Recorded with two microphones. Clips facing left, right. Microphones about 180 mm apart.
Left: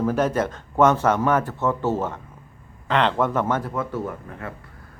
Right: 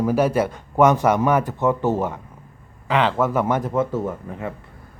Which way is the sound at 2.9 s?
5° right (ahead or behind).